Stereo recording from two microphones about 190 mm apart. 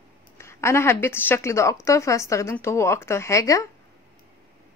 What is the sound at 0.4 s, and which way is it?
A woman's voice, 15° left (ahead or behind).